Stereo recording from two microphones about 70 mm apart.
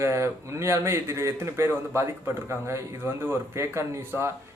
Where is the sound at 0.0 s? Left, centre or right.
Right.